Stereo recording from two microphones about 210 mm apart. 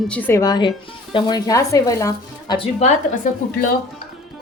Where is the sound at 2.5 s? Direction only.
30° left (ahead or behind).